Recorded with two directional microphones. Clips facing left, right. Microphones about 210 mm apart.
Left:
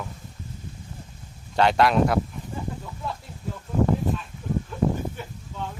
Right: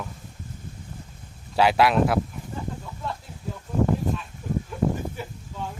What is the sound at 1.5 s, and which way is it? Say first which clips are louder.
Speech: even; 5° right (ahead or behind).